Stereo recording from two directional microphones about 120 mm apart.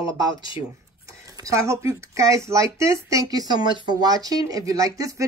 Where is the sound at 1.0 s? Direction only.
25° right (ahead or behind).